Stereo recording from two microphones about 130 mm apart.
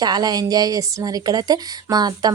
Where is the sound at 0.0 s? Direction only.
30° right (ahead or behind).